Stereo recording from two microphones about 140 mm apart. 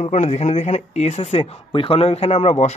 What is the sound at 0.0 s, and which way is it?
A man's voice, 55° left (ahead or behind).